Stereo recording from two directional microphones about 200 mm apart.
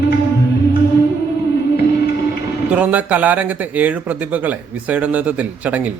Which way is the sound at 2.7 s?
5° right (ahead or behind).